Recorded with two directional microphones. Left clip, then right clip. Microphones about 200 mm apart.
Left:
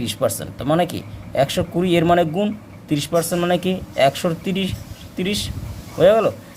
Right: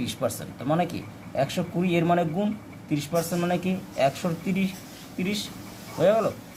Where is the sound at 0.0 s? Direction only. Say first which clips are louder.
Left 7 dB; 35° left (ahead or behind).